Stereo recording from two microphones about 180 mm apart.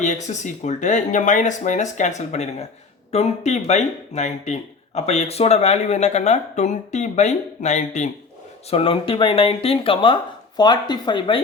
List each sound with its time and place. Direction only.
0.3 s speech: 40° left (ahead or behind)
8.7 s speech: 30° left (ahead or behind)